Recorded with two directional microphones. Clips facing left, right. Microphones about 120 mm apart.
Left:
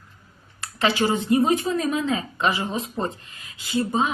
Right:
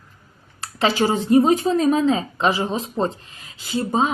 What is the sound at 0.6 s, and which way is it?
Speech, 30° right (ahead or behind).